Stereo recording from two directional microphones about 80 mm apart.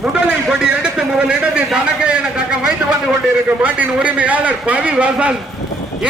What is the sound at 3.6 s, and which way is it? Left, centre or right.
A man's voice, centre.